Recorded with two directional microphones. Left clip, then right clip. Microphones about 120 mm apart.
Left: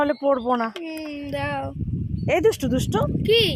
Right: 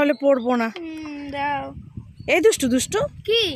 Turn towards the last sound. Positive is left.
turn(degrees=-25)  # may be behind; listen again after turning